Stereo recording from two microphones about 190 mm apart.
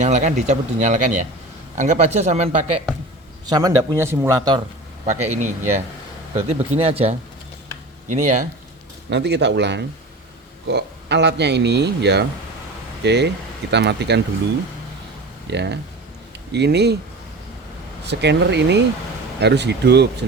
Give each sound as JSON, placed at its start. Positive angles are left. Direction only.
{"t": 0.0, "sound": "speech", "side_deg": -40}
{"t": 3.5, "sound": "speech", "side_deg": -15}
{"t": 5.0, "sound": "speech", "side_deg": -35}
{"t": 8.0, "sound": "speech", "side_deg": -40}
{"t": 9.0, "sound": "speech", "side_deg": -65}
{"t": 15.4, "sound": "speech", "side_deg": -65}
{"t": 18.0, "sound": "speech", "side_deg": -65}